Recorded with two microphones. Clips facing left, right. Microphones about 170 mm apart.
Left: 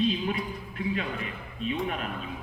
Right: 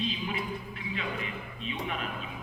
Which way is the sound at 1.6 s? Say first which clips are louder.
Left 6 dB; 45° left (ahead or behind).